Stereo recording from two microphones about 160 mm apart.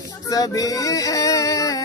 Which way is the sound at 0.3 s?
20° left (ahead or behind).